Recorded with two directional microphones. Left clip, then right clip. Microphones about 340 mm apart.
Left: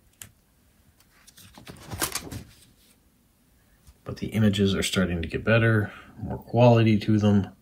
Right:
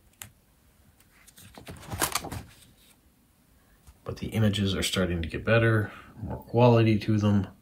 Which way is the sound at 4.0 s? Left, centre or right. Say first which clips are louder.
Left 3 dB; centre.